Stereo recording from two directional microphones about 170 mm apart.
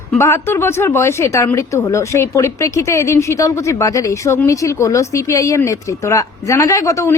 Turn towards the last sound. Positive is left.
turn(degrees=20)  # may be behind; listen again after turning